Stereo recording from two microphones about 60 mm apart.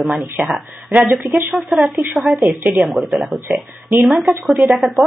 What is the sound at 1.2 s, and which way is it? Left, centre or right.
Speech, right.